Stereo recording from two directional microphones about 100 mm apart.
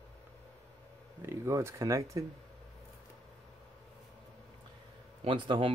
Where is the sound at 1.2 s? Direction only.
25° right (ahead or behind).